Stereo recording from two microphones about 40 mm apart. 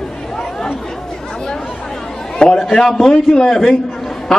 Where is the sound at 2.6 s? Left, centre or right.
Centre.